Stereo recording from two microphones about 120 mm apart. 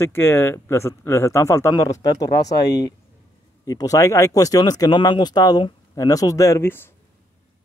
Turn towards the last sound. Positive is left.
turn(degrees=25)  # may be behind; listen again after turning